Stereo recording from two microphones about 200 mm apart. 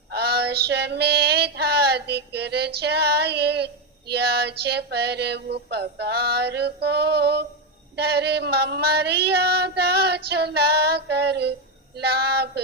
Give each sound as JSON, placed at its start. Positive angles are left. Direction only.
{"t": 0.1, "sound": "female singing", "side_deg": -55}